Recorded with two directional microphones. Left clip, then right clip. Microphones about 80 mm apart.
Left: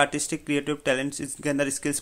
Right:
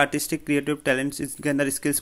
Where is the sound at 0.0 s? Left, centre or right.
Right.